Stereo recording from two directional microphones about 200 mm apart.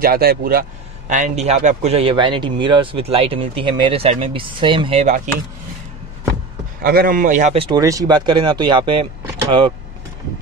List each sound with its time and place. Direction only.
0.0 s speech: 50° right (ahead or behind)
6.8 s speech: 45° right (ahead or behind); by 7.8 s 25° right (ahead or behind)
7.8 s speech: 15° right (ahead or behind)